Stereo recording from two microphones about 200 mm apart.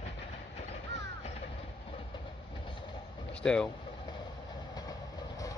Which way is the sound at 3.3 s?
5° left (ahead or behind).